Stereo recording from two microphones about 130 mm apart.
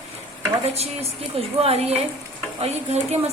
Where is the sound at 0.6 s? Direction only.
55° right (ahead or behind).